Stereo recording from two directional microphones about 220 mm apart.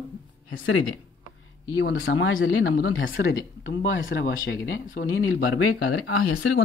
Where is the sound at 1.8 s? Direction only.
60° left (ahead or behind).